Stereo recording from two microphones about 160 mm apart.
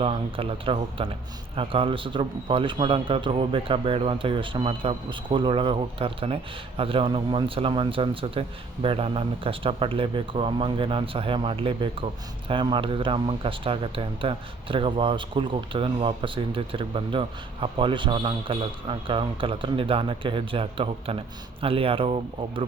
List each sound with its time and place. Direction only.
0.0 s a man's voice: 35° right (ahead or behind)